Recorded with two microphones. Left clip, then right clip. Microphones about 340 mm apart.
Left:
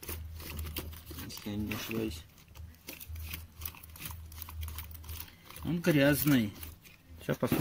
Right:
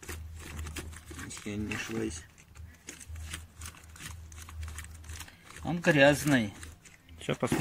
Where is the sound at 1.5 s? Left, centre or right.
Left.